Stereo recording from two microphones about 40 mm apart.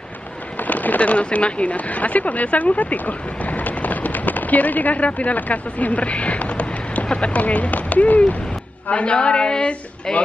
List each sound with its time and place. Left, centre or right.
0.6 s a woman's voice: left
10.1 s a man's voice: centre